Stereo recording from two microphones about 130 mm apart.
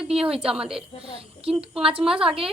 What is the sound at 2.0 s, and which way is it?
Speech, centre (ahead or behind).